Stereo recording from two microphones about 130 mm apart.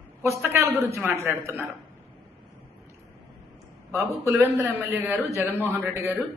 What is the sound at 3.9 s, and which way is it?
A man's voice, 25° right (ahead or behind).